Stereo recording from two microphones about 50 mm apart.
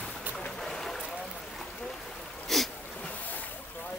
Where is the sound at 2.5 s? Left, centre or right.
Centre.